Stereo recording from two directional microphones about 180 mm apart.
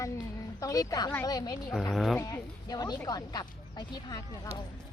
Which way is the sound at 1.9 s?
Centre (ahead or behind).